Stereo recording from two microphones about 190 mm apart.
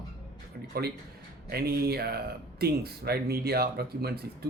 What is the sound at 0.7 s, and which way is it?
Speech, 55° right (ahead or behind).